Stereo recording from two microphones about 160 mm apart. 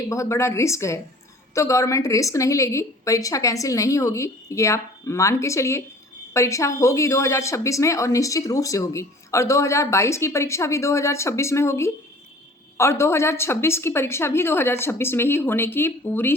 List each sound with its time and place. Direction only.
0.1 s speech: 20° left (ahead or behind)